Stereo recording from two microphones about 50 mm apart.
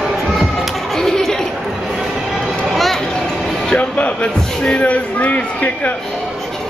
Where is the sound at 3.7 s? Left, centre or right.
Left.